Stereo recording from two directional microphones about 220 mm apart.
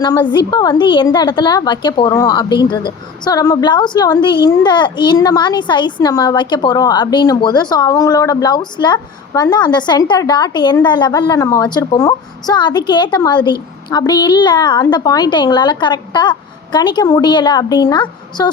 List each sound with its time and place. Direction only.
0.0 s a woman's voice: 15° left (ahead or behind)